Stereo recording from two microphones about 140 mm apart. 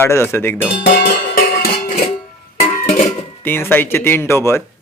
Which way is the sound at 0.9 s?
80° left.